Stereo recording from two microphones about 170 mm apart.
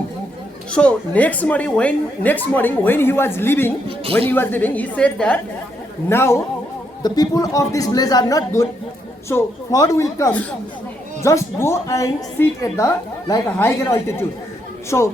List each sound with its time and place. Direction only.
0.7 s a woman's voice: 5° left (ahead or behind)